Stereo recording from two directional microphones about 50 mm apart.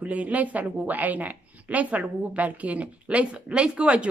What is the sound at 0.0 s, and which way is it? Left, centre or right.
A woman's voice, right.